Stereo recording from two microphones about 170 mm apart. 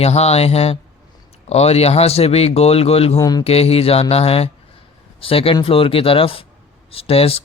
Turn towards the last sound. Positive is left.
turn(degrees=35)  # may be behind; listen again after turning